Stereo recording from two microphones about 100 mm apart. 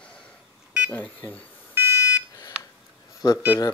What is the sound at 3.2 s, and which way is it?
Speech, 45° left (ahead or behind).